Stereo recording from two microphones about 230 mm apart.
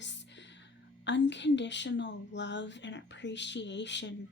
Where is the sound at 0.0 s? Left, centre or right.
Left.